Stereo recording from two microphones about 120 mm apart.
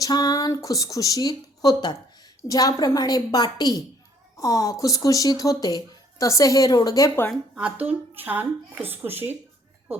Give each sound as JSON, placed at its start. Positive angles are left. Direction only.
{"t": 0.0, "sound": "a woman's voice", "side_deg": 30}
{"t": 7.5, "sound": "speech", "side_deg": -10}